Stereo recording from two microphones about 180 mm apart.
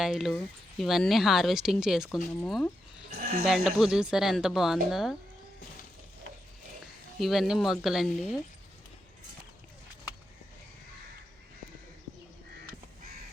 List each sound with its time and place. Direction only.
0.0 s speech: centre (ahead or behind)
3.1 s a sound: 60° right (ahead or behind)
3.4 s speech: centre (ahead or behind)
7.2 s speech: centre (ahead or behind)